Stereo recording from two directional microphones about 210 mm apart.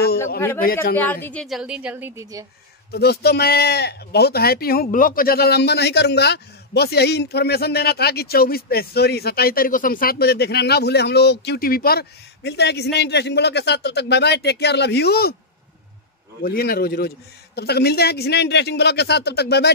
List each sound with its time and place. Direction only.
1.2 s a woman's voice: 5° left (ahead or behind); by 2.4 s 10° right (ahead or behind)
2.9 s speech: 50° left (ahead or behind)
16.4 s speech: 45° left (ahead or behind)